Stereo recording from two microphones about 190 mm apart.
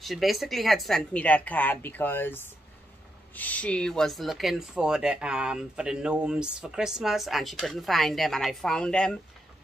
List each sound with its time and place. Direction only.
0.0 s speech: centre (ahead or behind)